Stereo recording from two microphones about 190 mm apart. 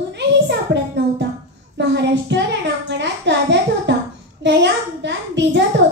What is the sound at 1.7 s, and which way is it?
A child's voice, 65° right (ahead or behind).